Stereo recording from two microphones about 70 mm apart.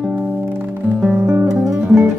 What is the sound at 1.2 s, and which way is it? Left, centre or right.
Guitar, right.